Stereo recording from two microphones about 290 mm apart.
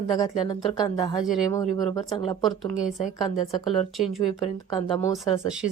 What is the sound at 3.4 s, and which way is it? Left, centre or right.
Speech, centre.